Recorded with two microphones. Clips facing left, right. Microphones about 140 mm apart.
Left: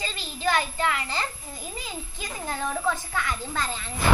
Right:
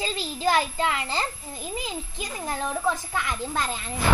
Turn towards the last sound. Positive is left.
turn(degrees=-10)  # may be behind; listen again after turning